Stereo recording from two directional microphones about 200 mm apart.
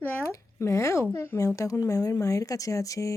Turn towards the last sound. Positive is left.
turn(degrees=15)  # may be behind; listen again after turning